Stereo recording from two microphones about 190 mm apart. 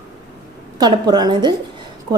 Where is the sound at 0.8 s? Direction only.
20° right (ahead or behind).